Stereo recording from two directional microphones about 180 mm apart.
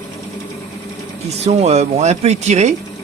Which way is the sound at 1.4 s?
35° right (ahead or behind).